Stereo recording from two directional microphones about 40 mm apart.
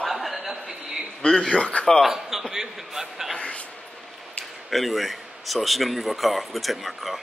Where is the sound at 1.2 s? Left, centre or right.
Centre.